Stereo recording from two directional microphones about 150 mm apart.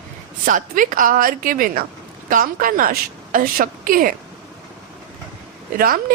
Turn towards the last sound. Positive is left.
turn(degrees=-75)  # may be behind; listen again after turning